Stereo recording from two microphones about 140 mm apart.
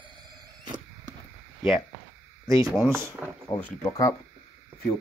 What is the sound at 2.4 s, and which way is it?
Speech, 25° right (ahead or behind).